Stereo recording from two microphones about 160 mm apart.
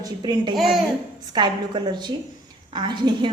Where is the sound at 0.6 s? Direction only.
Centre (ahead or behind).